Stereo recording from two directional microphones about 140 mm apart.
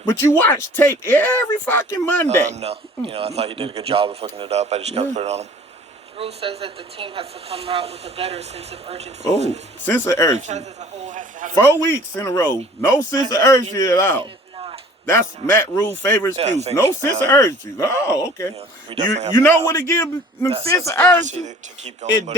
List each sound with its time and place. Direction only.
0.0 s speech: 20° left (ahead or behind)
2.4 s speech: 55° right (ahead or behind)
9.8 s speech: 15° left (ahead or behind)
10.3 s a man's voice: 55° right (ahead or behind)
11.6 s speech: 20° left (ahead or behind)
16.4 s speech: 50° right (ahead or behind)
16.7 s speech: 20° left (ahead or behind)
18.9 s a man's voice: 35° right (ahead or behind)
19.6 s speech: 20° left (ahead or behind)
21.2 s a man's voice: 55° right (ahead or behind)